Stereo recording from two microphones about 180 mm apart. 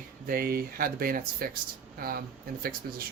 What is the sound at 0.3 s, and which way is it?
Speech, 55° right (ahead or behind).